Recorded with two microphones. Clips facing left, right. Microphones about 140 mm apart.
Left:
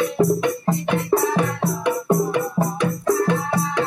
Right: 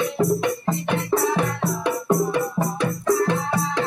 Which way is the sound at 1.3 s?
15° left (ahead or behind).